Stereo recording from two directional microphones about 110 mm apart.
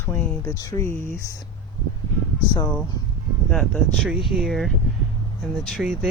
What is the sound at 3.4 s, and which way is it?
Speech, centre (ahead or behind).